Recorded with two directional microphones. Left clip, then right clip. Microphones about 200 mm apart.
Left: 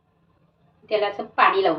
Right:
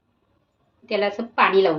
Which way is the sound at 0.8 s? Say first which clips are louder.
Even; 50° right (ahead or behind).